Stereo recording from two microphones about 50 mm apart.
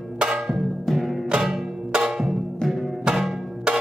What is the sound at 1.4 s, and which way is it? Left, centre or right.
Music, centre.